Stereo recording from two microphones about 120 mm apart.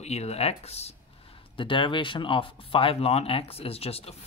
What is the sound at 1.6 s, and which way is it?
Speech, 45° left (ahead or behind).